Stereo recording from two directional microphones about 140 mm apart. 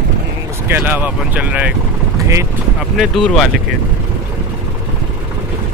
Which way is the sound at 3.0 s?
Centre (ahead or behind).